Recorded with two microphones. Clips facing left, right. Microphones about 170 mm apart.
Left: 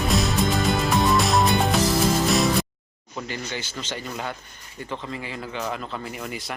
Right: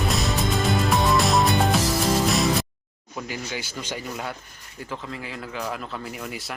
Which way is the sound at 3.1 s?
5° right (ahead or behind).